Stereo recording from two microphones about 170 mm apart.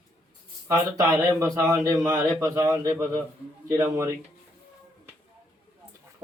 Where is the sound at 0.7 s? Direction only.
15° right (ahead or behind).